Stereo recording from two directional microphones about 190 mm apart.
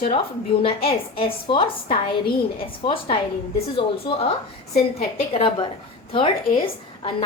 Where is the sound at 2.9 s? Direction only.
25° left (ahead or behind).